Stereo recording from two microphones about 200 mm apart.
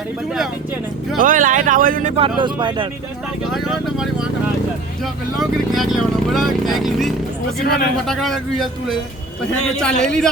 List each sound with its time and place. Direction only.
1.2 s speech: 40° right (ahead or behind); by 2.8 s 25° right (ahead or behind)
3.5 s speech: centre (ahead or behind)
5.4 s speech: centre (ahead or behind)
7.6 s speech: 50° left (ahead or behind)
8.0 s speech: centre (ahead or behind)
10.0 s speech: 5° left (ahead or behind)